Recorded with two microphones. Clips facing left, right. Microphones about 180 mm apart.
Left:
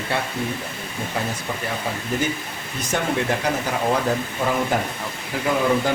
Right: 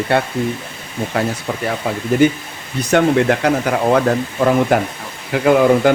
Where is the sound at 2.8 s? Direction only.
65° right (ahead or behind).